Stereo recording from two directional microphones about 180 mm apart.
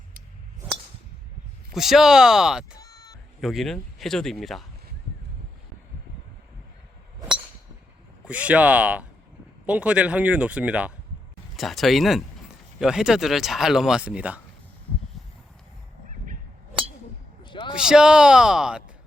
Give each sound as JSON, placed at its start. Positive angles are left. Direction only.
{"t": 1.7, "sound": "speech", "side_deg": 0}
{"t": 2.8, "sound": "a sound", "side_deg": 20}
{"t": 3.4, "sound": "speech", "side_deg": 0}
{"t": 8.2, "sound": "speech", "side_deg": -5}
{"t": 17.4, "sound": "a sound", "side_deg": 25}
{"t": 17.8, "sound": "speech", "side_deg": -5}